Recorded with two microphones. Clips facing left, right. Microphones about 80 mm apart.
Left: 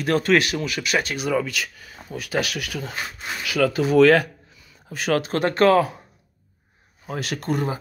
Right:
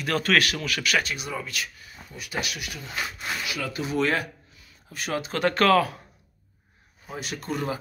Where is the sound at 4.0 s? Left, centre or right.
Left.